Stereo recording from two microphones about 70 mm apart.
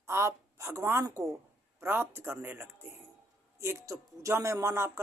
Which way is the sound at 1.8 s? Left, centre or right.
Right.